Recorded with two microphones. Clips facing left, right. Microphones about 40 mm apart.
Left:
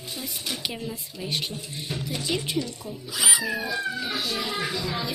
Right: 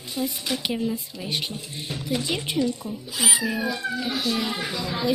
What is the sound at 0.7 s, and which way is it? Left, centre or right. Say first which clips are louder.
Speech: right 7 dB; centre.